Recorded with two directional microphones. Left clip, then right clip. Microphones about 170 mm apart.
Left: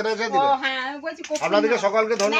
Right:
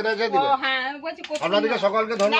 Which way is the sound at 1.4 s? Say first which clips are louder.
Left 1 dB; 65° right (ahead or behind).